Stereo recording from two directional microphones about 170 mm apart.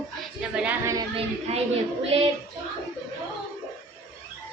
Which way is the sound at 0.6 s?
10° right (ahead or behind).